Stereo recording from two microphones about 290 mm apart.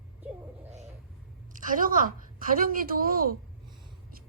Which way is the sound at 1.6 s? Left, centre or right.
Right.